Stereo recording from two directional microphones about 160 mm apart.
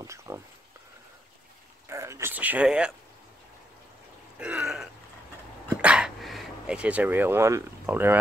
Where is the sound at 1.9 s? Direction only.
15° right (ahead or behind).